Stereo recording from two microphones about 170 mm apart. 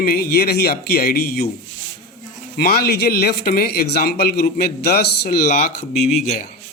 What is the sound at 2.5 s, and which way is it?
Speech, 70° left (ahead or behind).